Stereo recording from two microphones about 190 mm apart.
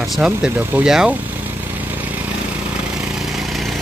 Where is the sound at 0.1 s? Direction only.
5° right (ahead or behind).